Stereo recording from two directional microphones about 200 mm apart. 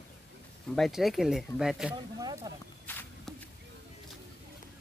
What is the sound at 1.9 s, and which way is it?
Speech, 20° right (ahead or behind).